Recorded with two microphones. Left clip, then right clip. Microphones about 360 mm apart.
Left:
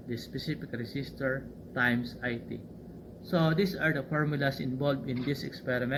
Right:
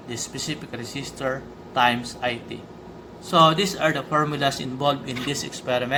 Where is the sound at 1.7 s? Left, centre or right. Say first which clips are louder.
Right 9 dB; right.